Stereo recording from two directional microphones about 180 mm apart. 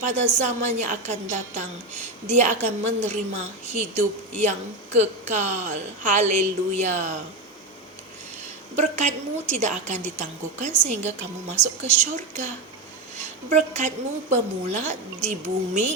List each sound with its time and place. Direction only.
0.0 s a woman's voice: 40° right (ahead or behind)
8.7 s a woman's voice: 40° right (ahead or behind)
13.5 s a woman's voice: 40° right (ahead or behind)